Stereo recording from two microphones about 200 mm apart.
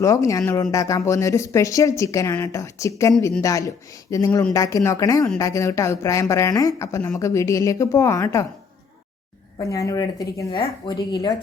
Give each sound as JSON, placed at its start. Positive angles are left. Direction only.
{"t": 0.0, "sound": "speech", "side_deg": 15}
{"t": 9.6, "sound": "speech", "side_deg": 15}